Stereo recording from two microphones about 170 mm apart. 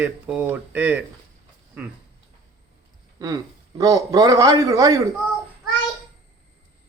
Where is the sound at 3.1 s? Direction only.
20° right (ahead or behind).